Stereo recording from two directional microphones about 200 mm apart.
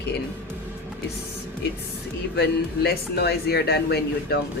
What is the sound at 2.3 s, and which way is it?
A woman's voice, 55° left (ahead or behind).